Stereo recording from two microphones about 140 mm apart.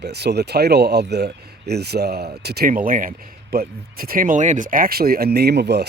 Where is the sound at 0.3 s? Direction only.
90° right.